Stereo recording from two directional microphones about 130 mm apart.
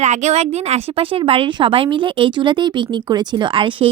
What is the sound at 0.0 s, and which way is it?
A woman's voice, 65° right (ahead or behind).